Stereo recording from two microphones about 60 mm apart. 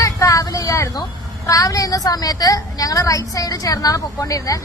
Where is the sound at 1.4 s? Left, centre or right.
Left.